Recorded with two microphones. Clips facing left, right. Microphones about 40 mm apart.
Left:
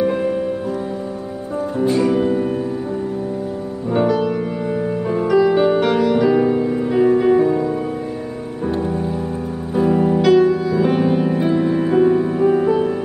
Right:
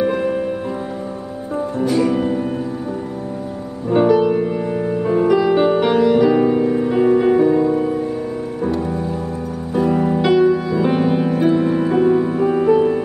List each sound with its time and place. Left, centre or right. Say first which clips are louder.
0.0 s music: even; centre
2.0 s music: even; centre
3.9 s music: right 4 dB; centre
9.8 s music: left 1 dB; centre